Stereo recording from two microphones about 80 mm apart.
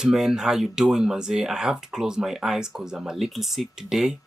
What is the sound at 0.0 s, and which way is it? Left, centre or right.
Speech, centre.